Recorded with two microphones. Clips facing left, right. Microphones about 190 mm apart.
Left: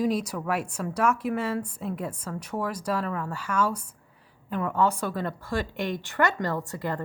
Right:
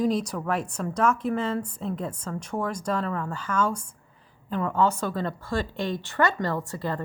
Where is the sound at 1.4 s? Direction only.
25° right (ahead or behind).